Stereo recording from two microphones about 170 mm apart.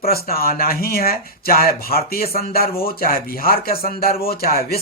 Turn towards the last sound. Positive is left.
turn(degrees=60)  # may be behind; listen again after turning